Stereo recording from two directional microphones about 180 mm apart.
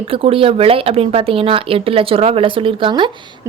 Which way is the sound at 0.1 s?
30° right (ahead or behind).